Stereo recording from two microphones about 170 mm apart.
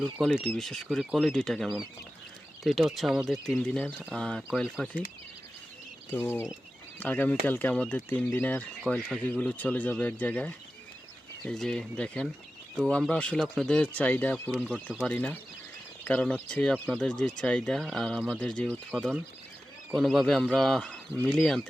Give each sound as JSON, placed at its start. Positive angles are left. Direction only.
{"t": 0.4, "sound": "speech", "side_deg": 5}
{"t": 6.1, "sound": "speech", "side_deg": 10}
{"t": 8.8, "sound": "speech", "side_deg": 0}